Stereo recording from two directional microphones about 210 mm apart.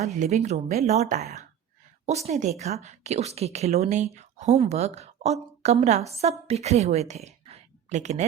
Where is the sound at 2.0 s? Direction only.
30° right (ahead or behind).